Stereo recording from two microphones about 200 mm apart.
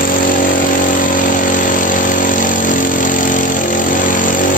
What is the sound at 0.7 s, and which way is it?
Power tool, 40° left (ahead or behind).